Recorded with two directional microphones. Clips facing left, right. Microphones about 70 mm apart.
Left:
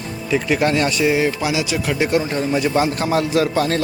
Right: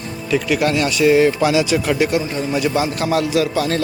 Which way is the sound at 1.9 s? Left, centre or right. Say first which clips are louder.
Even; left.